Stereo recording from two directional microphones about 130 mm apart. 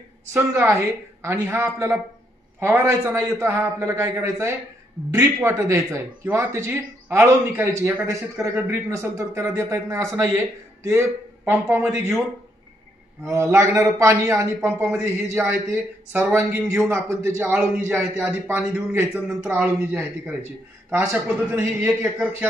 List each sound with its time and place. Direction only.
0.3 s a man's voice: 10° right (ahead or behind)
13.3 s a man's voice: 20° right (ahead or behind)
20.9 s a man's voice: 25° right (ahead or behind)
21.4 s a man's voice: 10° right (ahead or behind)